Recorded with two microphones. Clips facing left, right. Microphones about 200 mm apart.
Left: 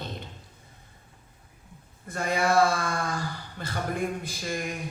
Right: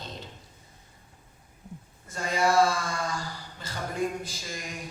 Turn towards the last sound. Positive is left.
turn(degrees=60)  # may be behind; listen again after turning